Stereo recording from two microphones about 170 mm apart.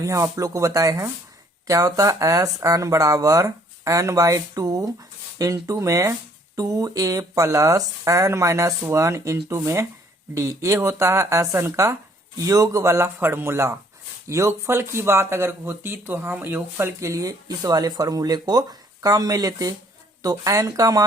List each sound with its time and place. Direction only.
0.0 s speech: 20° right (ahead or behind)